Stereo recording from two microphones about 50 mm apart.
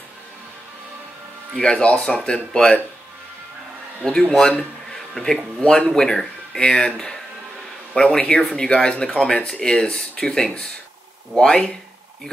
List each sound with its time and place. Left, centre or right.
1.6 s speech: left
4.0 s speech: centre
5.6 s speech: left
7.9 s speech: centre